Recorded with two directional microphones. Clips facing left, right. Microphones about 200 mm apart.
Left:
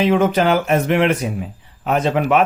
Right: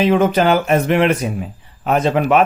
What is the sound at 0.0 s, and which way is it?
Speech, 35° right (ahead or behind).